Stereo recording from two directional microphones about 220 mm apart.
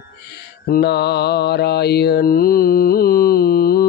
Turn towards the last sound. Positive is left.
turn(degrees=45)  # may be behind; listen again after turning